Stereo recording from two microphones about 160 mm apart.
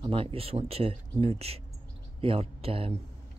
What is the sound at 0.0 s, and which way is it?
Speech, 35° right (ahead or behind).